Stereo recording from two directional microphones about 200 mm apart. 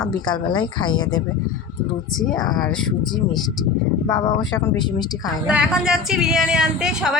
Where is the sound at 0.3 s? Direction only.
20° left (ahead or behind).